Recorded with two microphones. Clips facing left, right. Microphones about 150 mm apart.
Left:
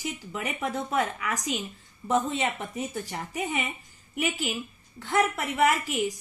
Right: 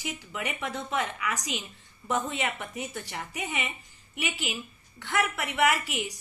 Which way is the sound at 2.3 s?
30° left (ahead or behind).